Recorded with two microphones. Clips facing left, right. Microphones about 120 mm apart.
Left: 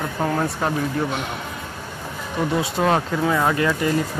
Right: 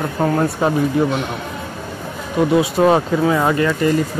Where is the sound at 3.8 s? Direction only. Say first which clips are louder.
Right 8 dB; 5° left (ahead or behind).